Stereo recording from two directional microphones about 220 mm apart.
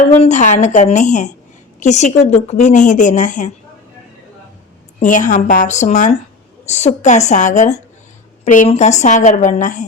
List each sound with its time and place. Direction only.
0.0 s a woman's voice: 30° left (ahead or behind)
4.9 s a woman's voice: 35° left (ahead or behind)